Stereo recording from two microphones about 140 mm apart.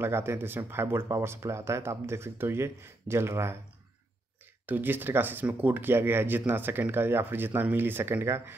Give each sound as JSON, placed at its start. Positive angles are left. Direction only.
{"t": 0.0, "sound": "speech", "side_deg": -15}
{"t": 4.6, "sound": "speech", "side_deg": -15}